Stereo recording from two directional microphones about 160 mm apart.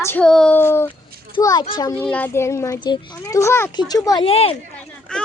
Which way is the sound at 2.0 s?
10° left (ahead or behind).